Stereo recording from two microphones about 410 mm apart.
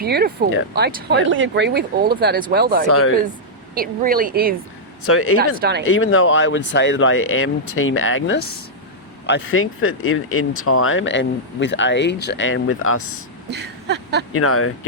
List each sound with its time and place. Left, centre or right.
0.0 s speech: right
2.8 s speech: left
3.8 s speech: right
5.0 s speech: left
5.5 s speech: right
5.9 s speech: left
13.5 s a sound: right
14.3 s speech: left